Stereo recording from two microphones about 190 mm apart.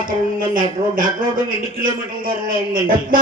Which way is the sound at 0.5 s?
45° right (ahead or behind).